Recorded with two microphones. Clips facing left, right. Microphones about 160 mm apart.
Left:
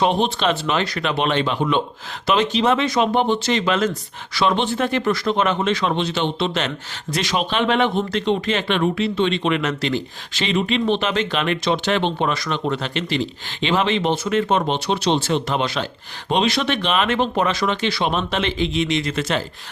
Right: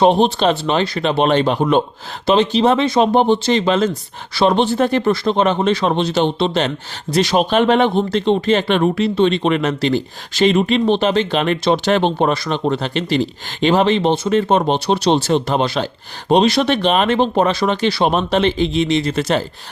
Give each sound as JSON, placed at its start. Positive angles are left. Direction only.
{"t": 0.0, "sound": "speech", "side_deg": -35}